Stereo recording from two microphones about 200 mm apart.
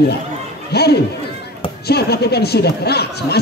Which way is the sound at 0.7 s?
55° left (ahead or behind).